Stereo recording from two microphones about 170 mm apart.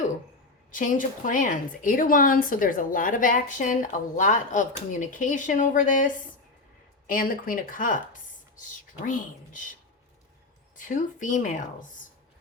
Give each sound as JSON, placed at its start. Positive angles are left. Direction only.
{"t": 0.7, "sound": "a woman's voice", "side_deg": 50}
{"t": 7.1, "sound": "speech", "side_deg": 55}
{"t": 9.0, "sound": "a woman's voice", "side_deg": 50}
{"t": 10.8, "sound": "a woman's voice", "side_deg": 50}